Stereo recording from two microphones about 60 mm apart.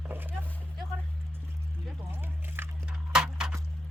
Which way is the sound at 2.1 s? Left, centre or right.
Right.